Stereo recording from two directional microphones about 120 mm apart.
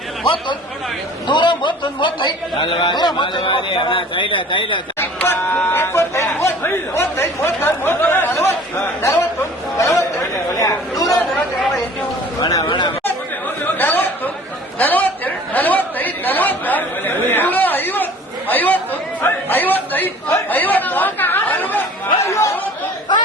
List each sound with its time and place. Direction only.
1.3 s a man's voice: 40° left (ahead or behind)
4.9 s speech: 20° left (ahead or behind)
9.0 s chatter: 20° left (ahead or behind)
12.4 s a sound: 30° left (ahead or behind)
13.7 s a sound: 15° left (ahead or behind)
14.8 s chatter: 15° left (ahead or behind)